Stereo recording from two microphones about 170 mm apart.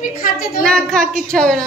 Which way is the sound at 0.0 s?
60° left (ahead or behind).